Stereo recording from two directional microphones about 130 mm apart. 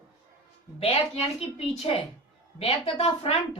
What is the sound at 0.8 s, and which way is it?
A woman's voice, 50° left (ahead or behind).